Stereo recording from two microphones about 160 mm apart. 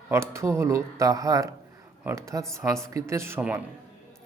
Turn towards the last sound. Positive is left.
turn(degrees=-10)  # may be behind; listen again after turning